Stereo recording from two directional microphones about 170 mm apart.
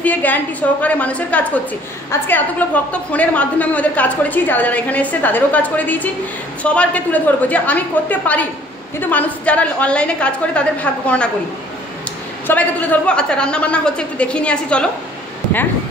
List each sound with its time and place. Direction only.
0.0 s a woman's voice: 10° left (ahead or behind)
12.4 s a woman's voice: 10° left (ahead or behind)